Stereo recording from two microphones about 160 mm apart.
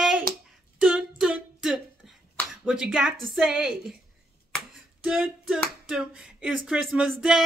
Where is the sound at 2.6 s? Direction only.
5° right (ahead or behind).